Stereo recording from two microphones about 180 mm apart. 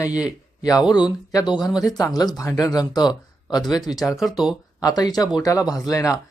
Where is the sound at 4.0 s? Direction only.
Centre (ahead or behind).